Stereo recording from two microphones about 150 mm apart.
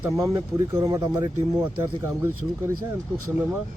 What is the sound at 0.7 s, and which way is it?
Speech, 25° right (ahead or behind).